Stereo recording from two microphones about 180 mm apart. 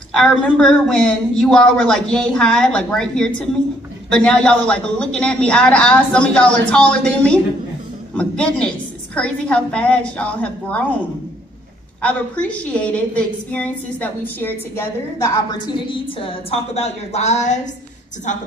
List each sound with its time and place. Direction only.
0.1 s a woman's voice: 5° left (ahead or behind)
12.0 s a woman's voice: 5° left (ahead or behind)
15.5 s a woman's voice: 30° left (ahead or behind)